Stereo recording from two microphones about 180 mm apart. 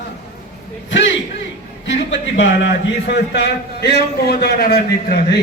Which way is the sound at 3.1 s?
70° left (ahead or behind).